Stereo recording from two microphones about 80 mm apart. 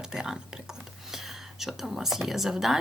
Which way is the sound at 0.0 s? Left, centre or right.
Centre.